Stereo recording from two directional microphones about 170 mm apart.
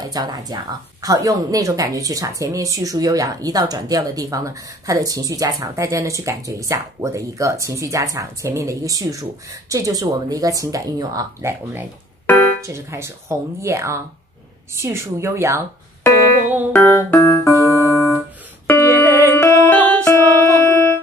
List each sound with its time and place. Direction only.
0.0 s speech: 20° right (ahead or behind)
12.3 s keyboard: 10° left (ahead or behind)
12.6 s speech: 15° right (ahead or behind)
16.7 s keyboard: 15° left (ahead or behind)
19.0 s music: 15° right (ahead or behind)
19.3 s music: 15° left (ahead or behind)